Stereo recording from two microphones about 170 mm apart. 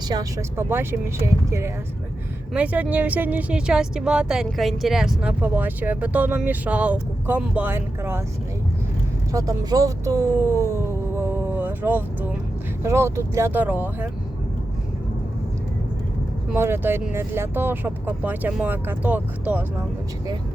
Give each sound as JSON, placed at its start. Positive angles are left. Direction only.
{"t": 0.1, "sound": "speech", "side_deg": -20}
{"t": 9.3, "sound": "speech", "side_deg": -20}
{"t": 16.5, "sound": "speech", "side_deg": -15}